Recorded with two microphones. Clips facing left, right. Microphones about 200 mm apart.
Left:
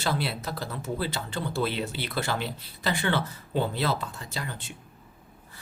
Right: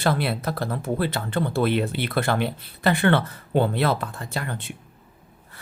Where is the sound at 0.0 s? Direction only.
55° right (ahead or behind).